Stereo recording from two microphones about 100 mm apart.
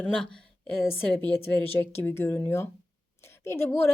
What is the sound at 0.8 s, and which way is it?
Speech, 20° left (ahead or behind).